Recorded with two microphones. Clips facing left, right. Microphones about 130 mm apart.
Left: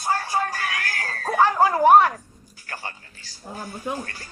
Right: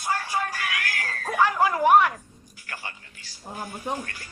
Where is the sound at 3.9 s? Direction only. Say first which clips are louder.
Left 2 dB; 40° left (ahead or behind).